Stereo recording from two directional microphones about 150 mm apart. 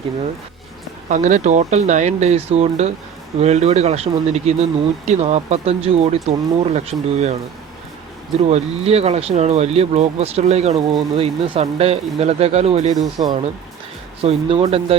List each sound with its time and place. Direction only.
1.0 s speech: 55° right (ahead or behind)
8.4 s speech: 45° right (ahead or behind)
13.0 s speech: 25° right (ahead or behind)
14.2 s speech: 40° right (ahead or behind)